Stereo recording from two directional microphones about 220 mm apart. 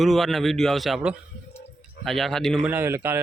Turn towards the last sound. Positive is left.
turn(degrees=-10)  # may be behind; listen again after turning